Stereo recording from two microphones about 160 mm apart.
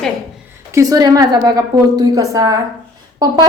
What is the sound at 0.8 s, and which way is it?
A woman's voice, 25° right (ahead or behind).